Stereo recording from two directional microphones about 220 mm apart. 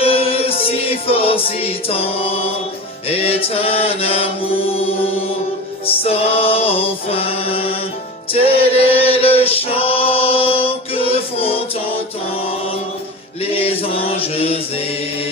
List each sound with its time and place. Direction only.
0.0 s music: 25° left (ahead or behind)
5.8 s music: 25° left (ahead or behind)
8.3 s choir: 25° left (ahead or behind)
13.4 s chant: 25° left (ahead or behind)